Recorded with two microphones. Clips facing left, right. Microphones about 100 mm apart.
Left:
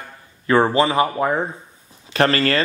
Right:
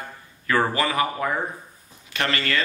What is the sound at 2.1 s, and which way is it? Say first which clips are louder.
Speech: left 8 dB; 35° left (ahead or behind).